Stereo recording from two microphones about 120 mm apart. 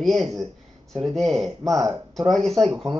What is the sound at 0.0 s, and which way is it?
Speech, centre (ahead or behind).